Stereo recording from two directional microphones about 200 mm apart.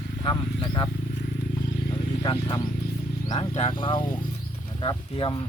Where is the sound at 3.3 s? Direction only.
30° left (ahead or behind).